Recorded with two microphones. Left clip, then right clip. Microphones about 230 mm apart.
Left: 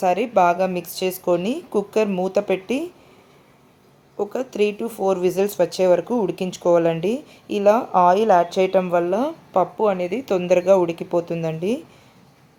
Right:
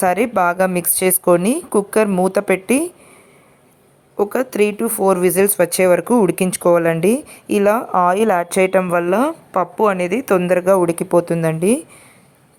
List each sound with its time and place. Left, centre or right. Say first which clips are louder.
0.0 s speech: right 2 dB; right
4.2 s speech: right 5 dB; right